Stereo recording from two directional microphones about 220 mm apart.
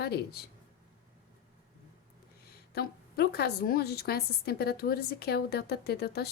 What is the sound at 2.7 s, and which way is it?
A woman's voice, 45° left (ahead or behind).